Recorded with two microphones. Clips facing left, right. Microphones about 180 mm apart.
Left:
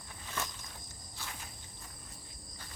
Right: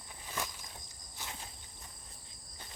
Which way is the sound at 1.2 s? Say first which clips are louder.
Even; 20° right (ahead or behind).